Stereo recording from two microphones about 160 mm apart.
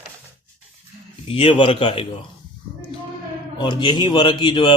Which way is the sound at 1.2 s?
35° left (ahead or behind).